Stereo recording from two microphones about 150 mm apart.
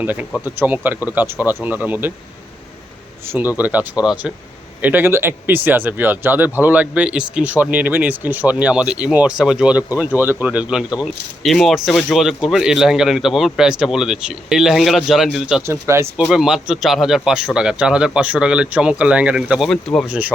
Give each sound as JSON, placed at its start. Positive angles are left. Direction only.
{"t": 0.0, "sound": "speech", "side_deg": -10}
{"t": 3.2, "sound": "speech", "side_deg": -10}
{"t": 15.6, "sound": "speech", "side_deg": -15}
{"t": 16.2, "sound": "speech", "side_deg": -5}
{"t": 20.1, "sound": "speech", "side_deg": -10}